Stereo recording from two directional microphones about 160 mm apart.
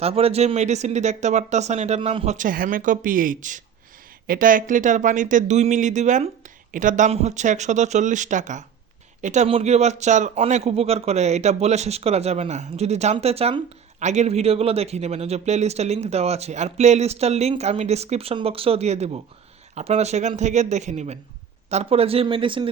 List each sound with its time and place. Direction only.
0.0 s a man's voice: 40° right (ahead or behind)